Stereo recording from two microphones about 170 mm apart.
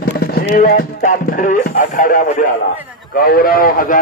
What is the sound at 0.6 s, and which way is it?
Speech, 50° left (ahead or behind).